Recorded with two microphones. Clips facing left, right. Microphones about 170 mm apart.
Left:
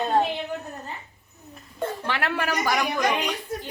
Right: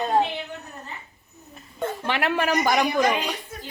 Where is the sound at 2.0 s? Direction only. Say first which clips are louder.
Right 5 dB; 20° right (ahead or behind).